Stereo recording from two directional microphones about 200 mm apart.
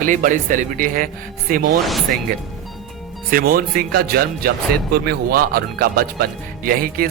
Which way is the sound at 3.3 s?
45° right (ahead or behind).